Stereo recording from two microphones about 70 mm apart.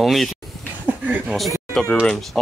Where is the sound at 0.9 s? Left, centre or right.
Right.